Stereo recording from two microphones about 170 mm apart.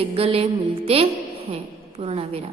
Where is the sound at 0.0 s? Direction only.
35° right (ahead or behind).